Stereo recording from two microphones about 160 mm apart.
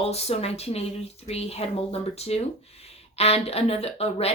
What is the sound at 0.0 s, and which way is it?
A woman's voice, 40° left (ahead or behind).